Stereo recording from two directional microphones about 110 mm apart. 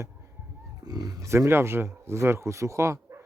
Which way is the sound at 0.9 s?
35° right (ahead or behind).